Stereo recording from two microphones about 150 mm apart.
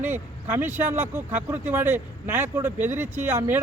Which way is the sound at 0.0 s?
15° right (ahead or behind).